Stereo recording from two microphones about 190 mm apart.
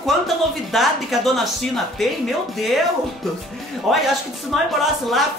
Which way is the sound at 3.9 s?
Centre (ahead or behind).